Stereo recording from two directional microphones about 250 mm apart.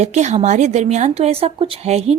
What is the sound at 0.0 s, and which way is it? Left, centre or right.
Speech, right.